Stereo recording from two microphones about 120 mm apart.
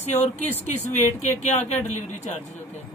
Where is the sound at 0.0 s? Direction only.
75° left (ahead or behind).